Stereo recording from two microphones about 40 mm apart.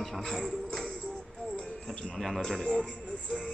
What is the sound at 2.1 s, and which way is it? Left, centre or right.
Speech, centre.